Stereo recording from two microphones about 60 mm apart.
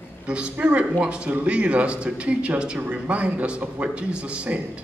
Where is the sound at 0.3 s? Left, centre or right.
Centre.